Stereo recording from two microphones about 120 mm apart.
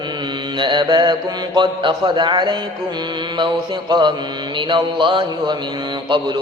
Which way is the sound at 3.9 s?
40° right (ahead or behind).